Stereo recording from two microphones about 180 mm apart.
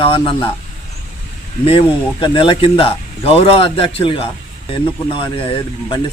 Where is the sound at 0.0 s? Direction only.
30° left (ahead or behind).